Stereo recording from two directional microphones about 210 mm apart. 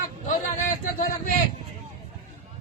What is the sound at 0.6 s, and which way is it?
Speech, 40° left (ahead or behind).